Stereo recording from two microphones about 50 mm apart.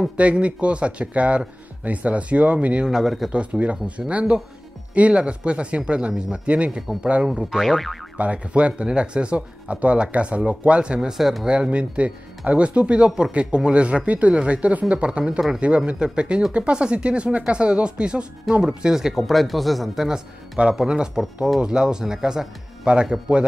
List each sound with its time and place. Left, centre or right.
0.2 s speech: right
2.9 s speech: centre
3.3 s speech: right
7.5 s speech: centre
8.2 s speech: right; by 11.4 s centre
11.4 s speech: right
18.9 s speech: centre
20.5 s speech: centre